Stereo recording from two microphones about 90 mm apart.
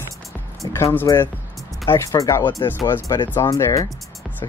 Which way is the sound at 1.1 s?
40° left (ahead or behind).